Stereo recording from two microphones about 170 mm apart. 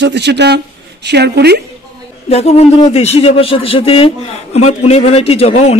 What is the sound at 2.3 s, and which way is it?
Speech, 40° left (ahead or behind).